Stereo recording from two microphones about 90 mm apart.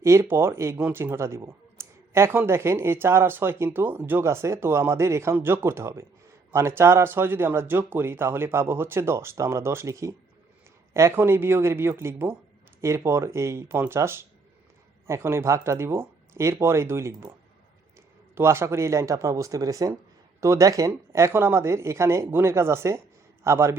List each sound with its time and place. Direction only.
0.0 s speech: 30° right (ahead or behind)
0.8 s speech: 15° right (ahead or behind)
1.1 s speech: 30° right (ahead or behind)
18.3 s a man's voice: 30° right (ahead or behind)